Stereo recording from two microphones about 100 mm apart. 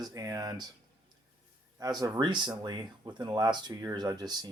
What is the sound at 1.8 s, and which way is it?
Speech, 40° right (ahead or behind).